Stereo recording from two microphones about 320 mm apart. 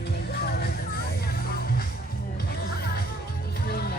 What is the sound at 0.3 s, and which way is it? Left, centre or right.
Music, left.